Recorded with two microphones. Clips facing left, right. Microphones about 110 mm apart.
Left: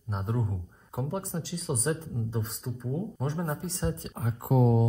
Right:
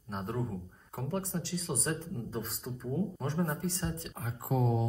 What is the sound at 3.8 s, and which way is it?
Speech, 40° left (ahead or behind).